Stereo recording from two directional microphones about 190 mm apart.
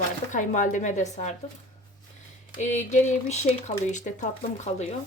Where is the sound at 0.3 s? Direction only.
40° left (ahead or behind).